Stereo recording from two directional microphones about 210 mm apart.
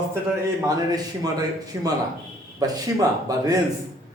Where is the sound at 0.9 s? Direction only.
20° right (ahead or behind).